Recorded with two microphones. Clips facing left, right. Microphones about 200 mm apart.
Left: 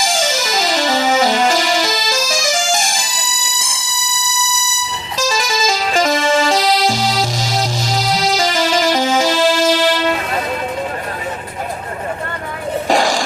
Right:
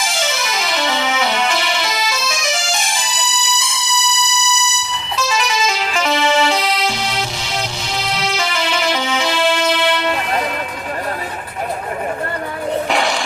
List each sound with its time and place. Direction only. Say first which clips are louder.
0.1 s music: left 4 dB; 35° left (ahead or behind)
5.1 s music: left 1 dB; 35° left (ahead or behind)
12.9 s a sound: left 3 dB; 35° left (ahead or behind)